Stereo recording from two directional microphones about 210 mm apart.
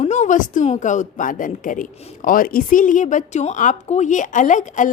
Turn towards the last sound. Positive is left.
turn(degrees=35)  # may be behind; listen again after turning